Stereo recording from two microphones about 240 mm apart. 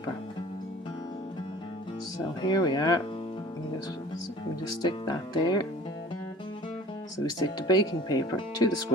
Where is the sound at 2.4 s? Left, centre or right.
Centre.